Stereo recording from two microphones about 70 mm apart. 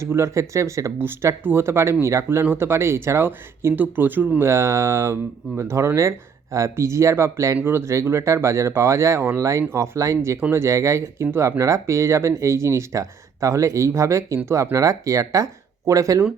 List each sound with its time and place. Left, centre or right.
0.0 s speech: right
4.4 s speech: right
7.6 s speech: right